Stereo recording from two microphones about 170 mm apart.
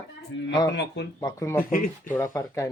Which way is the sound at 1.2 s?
15° left (ahead or behind).